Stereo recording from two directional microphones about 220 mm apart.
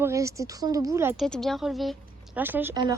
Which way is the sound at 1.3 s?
Centre (ahead or behind).